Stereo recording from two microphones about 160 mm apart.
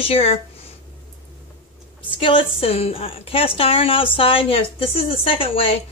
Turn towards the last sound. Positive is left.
turn(degrees=35)  # may be behind; listen again after turning